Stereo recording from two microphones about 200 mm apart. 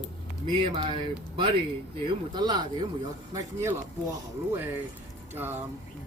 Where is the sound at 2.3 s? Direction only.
20° right (ahead or behind).